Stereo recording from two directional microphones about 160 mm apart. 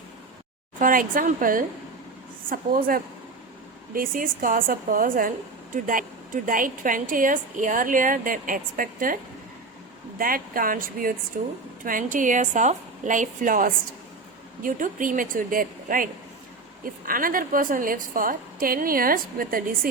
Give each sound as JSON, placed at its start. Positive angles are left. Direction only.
{"t": 0.8, "sound": "a woman's voice", "side_deg": -60}
{"t": 10.2, "sound": "a woman's voice", "side_deg": -60}
{"t": 17.1, "sound": "a woman's voice", "side_deg": -60}